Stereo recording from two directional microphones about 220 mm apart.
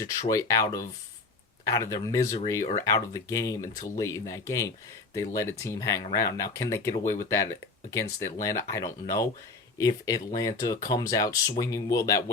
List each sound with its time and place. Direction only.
0.0 s speech: 15° left (ahead or behind)